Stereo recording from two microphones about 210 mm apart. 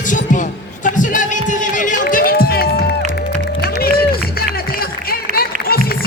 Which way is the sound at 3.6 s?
45° left (ahead or behind).